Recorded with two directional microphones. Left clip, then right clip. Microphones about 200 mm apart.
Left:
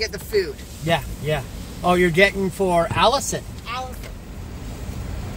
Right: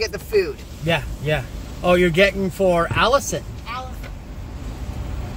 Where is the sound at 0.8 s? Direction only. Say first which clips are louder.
Right 1 dB; 15° right (ahead or behind).